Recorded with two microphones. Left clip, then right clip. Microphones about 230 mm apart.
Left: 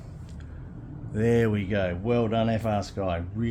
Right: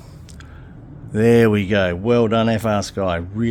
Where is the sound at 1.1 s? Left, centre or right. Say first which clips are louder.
Right 10 dB; right.